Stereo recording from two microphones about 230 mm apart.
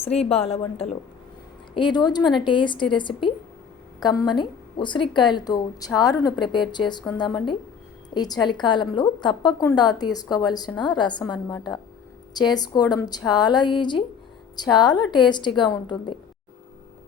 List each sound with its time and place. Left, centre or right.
0.0 s a woman's voice: left